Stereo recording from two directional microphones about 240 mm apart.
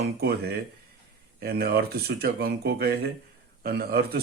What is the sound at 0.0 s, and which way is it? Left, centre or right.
Speech, right.